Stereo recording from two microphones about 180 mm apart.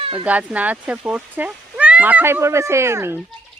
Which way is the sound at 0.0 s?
30° right (ahead or behind).